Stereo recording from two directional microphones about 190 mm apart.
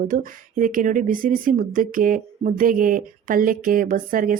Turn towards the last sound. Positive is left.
turn(degrees=-45)  # may be behind; listen again after turning